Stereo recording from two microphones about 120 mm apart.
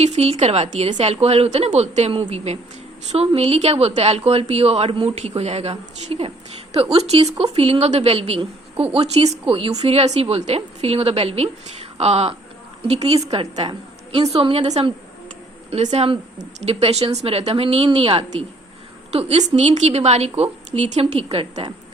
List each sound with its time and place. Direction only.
0.0 s a woman's voice: 60° right (ahead or behind)